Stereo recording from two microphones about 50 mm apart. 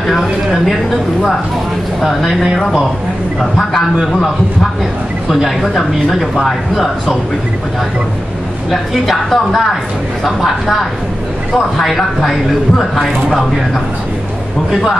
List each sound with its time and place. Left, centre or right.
0.0 s speech: centre
2.0 s speech: centre
5.3 s speech: centre
8.6 s speech: centre
14.7 s speech: centre